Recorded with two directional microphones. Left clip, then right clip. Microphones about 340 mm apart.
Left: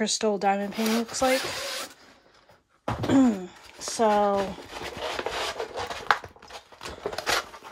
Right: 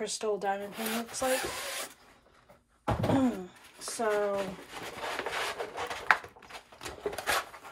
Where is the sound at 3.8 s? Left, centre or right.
Left.